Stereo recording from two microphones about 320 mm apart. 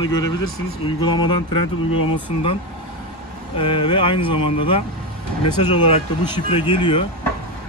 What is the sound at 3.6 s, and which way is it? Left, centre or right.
Speech, centre.